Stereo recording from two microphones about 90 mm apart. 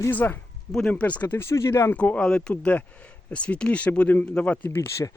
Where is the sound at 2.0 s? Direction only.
15° left (ahead or behind).